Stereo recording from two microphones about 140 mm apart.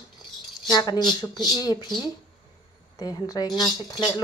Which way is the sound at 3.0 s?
30° left (ahead or behind).